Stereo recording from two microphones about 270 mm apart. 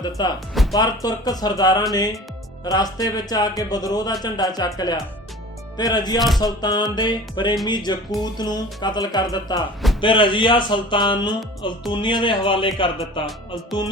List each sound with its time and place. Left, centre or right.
0.0 s a man's voice: centre